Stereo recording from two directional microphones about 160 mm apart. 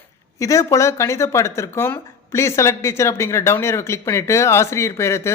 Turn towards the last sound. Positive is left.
turn(degrees=15)  # may be behind; listen again after turning